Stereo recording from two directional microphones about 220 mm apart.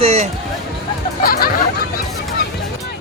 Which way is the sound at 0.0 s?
25° right (ahead or behind).